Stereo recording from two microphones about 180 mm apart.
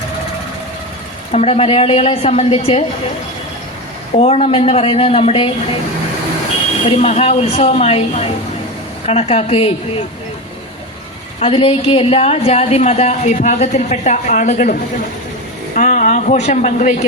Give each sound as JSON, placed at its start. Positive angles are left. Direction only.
{"t": 1.3, "sound": "a woman's voice", "side_deg": 35}
{"t": 4.1, "sound": "a woman's voice", "side_deg": 35}
{"t": 6.9, "sound": "a woman's voice", "side_deg": 35}
{"t": 11.3, "sound": "a woman's voice", "side_deg": 30}